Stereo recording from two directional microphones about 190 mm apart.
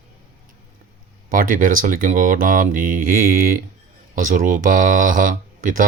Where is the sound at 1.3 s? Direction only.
45° right (ahead or behind).